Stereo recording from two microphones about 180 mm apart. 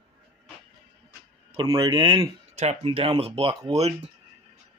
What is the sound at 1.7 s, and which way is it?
Speech, 25° right (ahead or behind).